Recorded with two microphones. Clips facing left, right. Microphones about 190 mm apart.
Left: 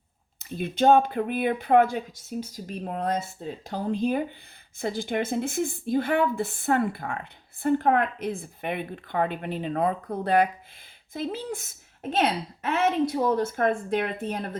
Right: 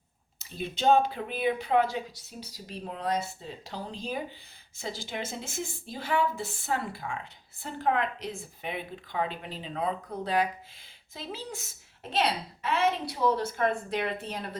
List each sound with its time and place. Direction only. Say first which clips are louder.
0.3 s speech: left 8 dB; 55° left (ahead or behind)